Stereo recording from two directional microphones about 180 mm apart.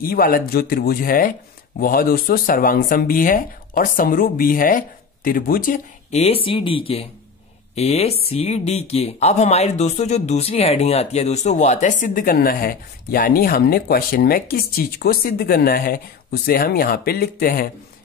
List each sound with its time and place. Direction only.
0.0 s speech: 55° left (ahead or behind)
6.1 s speech: 35° left (ahead or behind); by 17.6 s 55° left (ahead or behind)